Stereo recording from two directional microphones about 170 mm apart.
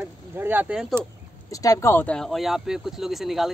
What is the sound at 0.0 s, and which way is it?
Speech, 10° right (ahead or behind).